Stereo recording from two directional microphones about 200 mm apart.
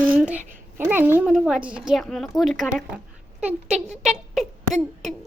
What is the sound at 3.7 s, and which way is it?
Speech, 35° right (ahead or behind).